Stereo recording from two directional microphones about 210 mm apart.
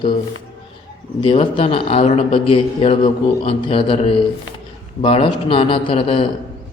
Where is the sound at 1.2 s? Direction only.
25° left (ahead or behind).